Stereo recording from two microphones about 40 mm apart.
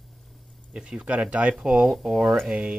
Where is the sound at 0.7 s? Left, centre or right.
Right.